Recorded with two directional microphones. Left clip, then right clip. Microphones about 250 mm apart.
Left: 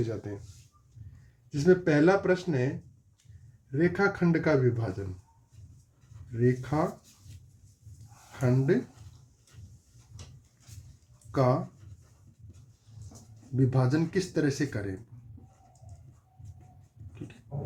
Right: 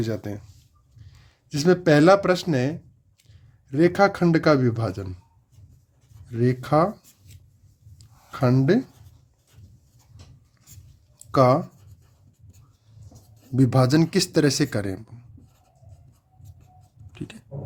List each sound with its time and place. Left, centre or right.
0.0 s speech: right
1.5 s speech: right
3.7 s speech: right
6.4 s speech: right
8.4 s speech: right
11.3 s speech: right
13.6 s speech: right
17.5 s a sound: right